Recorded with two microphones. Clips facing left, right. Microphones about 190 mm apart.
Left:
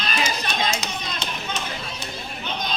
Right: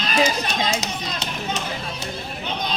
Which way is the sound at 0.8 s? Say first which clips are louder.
Right 2 dB; 40° right (ahead or behind).